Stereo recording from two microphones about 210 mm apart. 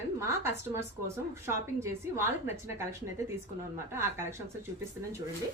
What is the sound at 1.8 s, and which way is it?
Speech, 10° right (ahead or behind).